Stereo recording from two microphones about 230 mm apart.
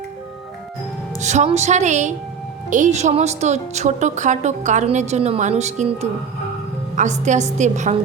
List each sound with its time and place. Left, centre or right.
1.2 s a woman's voice: right